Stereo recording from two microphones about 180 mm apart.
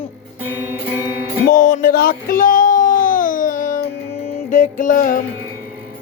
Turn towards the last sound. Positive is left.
turn(degrees=50)  # may be behind; listen again after turning